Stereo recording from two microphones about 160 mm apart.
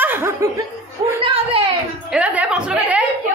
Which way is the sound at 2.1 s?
5° right (ahead or behind).